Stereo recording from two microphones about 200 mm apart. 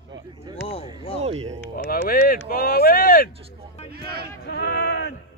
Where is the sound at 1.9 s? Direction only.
45° left (ahead or behind).